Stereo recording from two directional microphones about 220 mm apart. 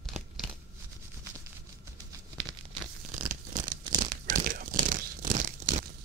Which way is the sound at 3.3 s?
35° right (ahead or behind).